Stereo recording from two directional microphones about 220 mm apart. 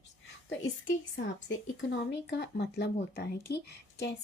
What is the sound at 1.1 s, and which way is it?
Speech, 55° left (ahead or behind).